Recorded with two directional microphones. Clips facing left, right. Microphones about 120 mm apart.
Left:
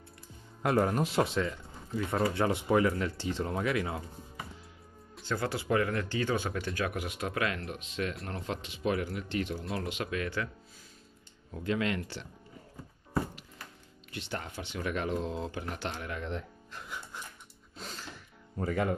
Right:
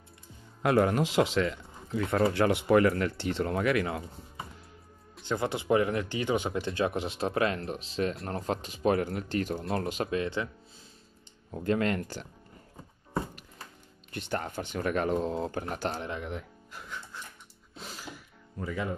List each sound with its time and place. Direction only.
0.6 s speech: 90° right
2.0 s speech: 75° right (ahead or behind)
5.2 s speech: 20° right (ahead or behind); by 10.0 s 40° right (ahead or behind)
10.0 s speech: 25° right (ahead or behind)
11.5 s speech: 45° right (ahead or behind)
14.1 s speech: 50° right (ahead or behind)
16.3 s speech: 5° right (ahead or behind)
17.7 s music: 5° right (ahead or behind)
18.6 s speech: 50° left (ahead or behind)